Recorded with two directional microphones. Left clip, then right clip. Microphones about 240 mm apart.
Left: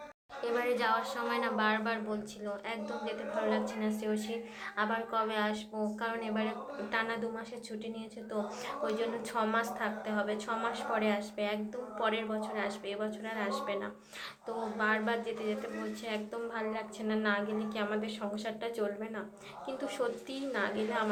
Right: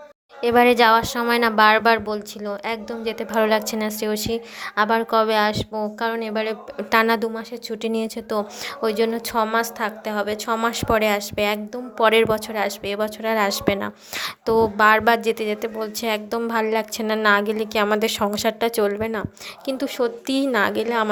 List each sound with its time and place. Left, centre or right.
0.4 s a woman's voice: right